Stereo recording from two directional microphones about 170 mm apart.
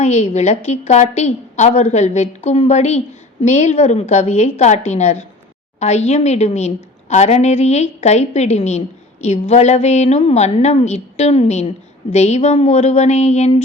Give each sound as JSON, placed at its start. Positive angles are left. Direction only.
{"t": 0.0, "sound": "a woman's voice", "side_deg": 40}